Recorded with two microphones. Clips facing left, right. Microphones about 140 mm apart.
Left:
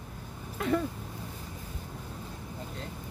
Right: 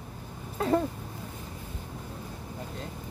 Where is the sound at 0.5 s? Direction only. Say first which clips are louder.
Right 3 dB; 35° right (ahead or behind).